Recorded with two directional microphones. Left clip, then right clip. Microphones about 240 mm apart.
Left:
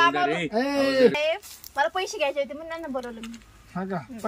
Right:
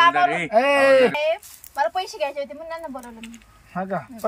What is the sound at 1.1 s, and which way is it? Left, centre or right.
Speech, centre.